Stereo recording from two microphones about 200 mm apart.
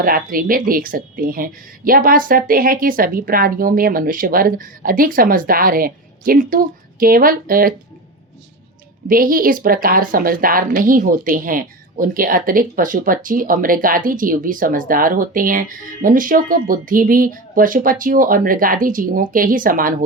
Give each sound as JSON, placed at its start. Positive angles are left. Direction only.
{"t": 0.0, "sound": "a woman's voice", "side_deg": -45}
{"t": 9.0, "sound": "a woman's voice", "side_deg": -45}